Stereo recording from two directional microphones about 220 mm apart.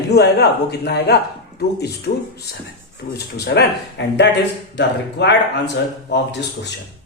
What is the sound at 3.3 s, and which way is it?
Speech, 50° left (ahead or behind).